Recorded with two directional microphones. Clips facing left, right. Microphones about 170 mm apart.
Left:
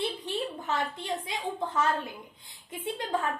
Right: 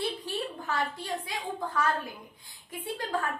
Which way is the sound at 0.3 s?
20° left (ahead or behind).